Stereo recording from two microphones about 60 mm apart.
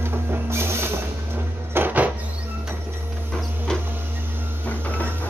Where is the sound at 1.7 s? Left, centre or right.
Right.